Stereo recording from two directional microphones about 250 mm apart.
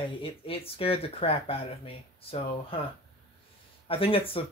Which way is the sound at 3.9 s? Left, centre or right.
Left.